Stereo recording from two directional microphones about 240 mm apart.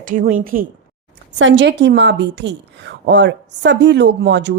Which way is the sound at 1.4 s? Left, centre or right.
Right.